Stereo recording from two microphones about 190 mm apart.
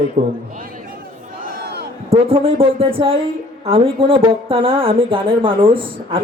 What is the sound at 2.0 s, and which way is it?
A man's voice, 30° right (ahead or behind).